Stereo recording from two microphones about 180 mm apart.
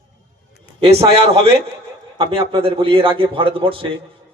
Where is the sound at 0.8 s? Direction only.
30° right (ahead or behind).